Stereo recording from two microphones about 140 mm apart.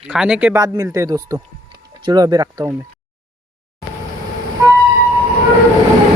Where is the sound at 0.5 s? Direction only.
25° right (ahead or behind).